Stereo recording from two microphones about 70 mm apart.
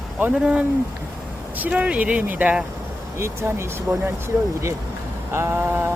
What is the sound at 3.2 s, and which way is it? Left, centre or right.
Speech, right.